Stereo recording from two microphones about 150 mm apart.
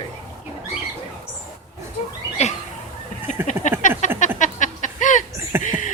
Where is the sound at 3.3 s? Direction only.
55° left (ahead or behind).